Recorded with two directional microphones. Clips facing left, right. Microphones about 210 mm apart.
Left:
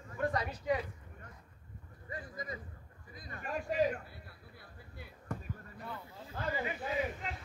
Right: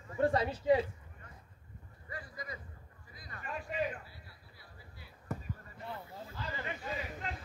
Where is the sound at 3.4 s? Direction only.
40° left (ahead or behind).